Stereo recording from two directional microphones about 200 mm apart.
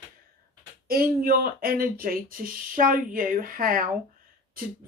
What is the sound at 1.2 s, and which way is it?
Speech, 45° right (ahead or behind).